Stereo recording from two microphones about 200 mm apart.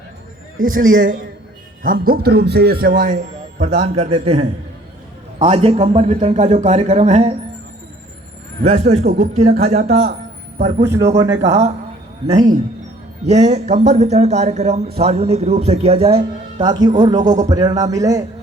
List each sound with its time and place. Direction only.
0.6 s a man's voice: 40° right (ahead or behind)
3.6 s speech: 30° right (ahead or behind)
8.6 s speech: 30° right (ahead or behind)
12.3 s speech: 20° right (ahead or behind)
13.2 s speech: 35° right (ahead or behind)
17.2 s speech: 40° right (ahead or behind)
17.5 s a man's voice: 20° right (ahead or behind)